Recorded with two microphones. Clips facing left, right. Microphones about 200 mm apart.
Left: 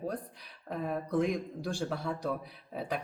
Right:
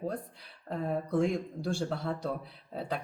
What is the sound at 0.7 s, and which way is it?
A man's voice, 15° left (ahead or behind).